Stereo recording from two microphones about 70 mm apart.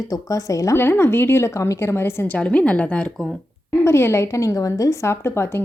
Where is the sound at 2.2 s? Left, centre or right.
Centre.